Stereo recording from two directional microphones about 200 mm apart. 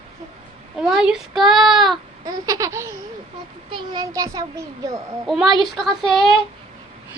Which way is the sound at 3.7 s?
20° right (ahead or behind).